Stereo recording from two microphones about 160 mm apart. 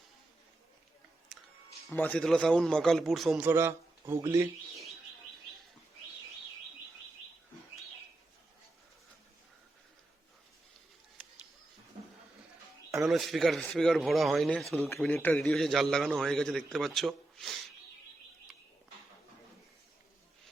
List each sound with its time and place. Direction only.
1.3 s music: centre (ahead or behind)
1.9 s a man's voice: 10° left (ahead or behind); by 4.4 s 15° right (ahead or behind)
13.1 s a man's voice: centre (ahead or behind)
14.8 s a man's voice: 15° left (ahead or behind); by 17.7 s centre (ahead or behind)